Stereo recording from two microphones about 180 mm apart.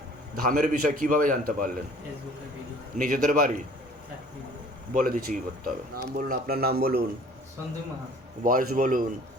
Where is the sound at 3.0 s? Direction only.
50° right (ahead or behind).